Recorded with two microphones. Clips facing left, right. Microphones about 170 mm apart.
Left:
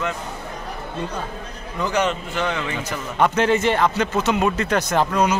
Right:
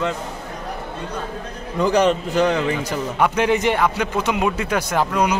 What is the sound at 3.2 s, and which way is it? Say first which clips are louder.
A man's voice: left 1 dB; 10° right (ahead or behind).